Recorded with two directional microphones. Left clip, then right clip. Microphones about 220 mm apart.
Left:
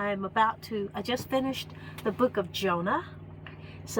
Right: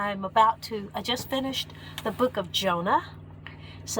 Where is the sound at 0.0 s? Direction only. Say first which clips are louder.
Right 4 dB; 35° right (ahead or behind).